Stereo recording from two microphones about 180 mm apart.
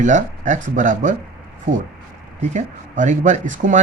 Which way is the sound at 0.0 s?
45° right (ahead or behind).